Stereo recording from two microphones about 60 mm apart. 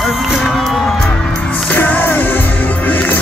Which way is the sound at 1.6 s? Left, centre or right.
Left.